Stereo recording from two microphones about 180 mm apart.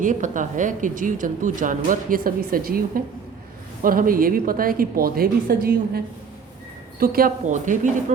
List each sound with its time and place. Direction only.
0.0 s speech: 45° right (ahead or behind)
7.0 s speech: 55° right (ahead or behind)